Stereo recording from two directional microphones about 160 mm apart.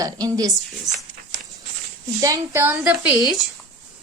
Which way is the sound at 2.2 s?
20° right (ahead or behind).